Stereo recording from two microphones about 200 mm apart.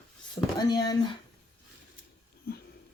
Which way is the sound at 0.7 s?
20° left (ahead or behind).